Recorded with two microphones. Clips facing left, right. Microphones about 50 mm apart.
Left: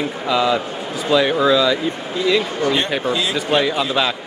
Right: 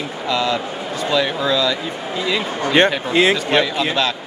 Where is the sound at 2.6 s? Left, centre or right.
Right.